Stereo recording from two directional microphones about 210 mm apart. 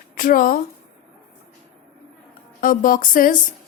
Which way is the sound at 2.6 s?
40° left (ahead or behind).